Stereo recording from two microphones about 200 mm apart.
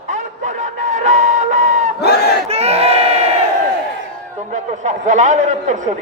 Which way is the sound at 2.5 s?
30° right (ahead or behind).